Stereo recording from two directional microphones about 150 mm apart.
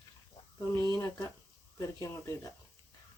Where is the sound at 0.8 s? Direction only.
20° left (ahead or behind).